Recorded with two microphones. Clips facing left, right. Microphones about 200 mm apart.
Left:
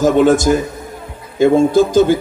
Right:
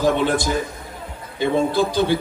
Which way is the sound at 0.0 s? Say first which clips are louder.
Left 8 dB; 45° left (ahead or behind).